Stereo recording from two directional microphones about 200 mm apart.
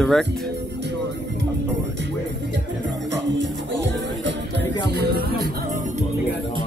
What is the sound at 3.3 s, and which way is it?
Music, 60° right (ahead or behind).